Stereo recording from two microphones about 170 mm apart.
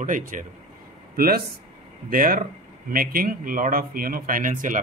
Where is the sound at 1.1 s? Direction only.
60° right (ahead or behind).